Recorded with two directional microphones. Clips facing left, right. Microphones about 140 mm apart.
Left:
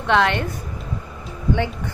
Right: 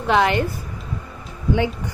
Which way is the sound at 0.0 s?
5° right (ahead or behind).